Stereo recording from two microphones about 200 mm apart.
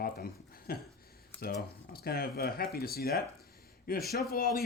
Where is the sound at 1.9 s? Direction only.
50° left (ahead or behind).